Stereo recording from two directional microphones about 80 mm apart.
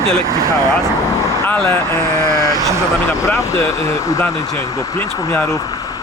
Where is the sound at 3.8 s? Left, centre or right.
Left.